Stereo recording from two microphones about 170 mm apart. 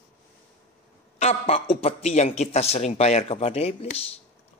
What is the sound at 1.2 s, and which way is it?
Speech, 35° left (ahead or behind).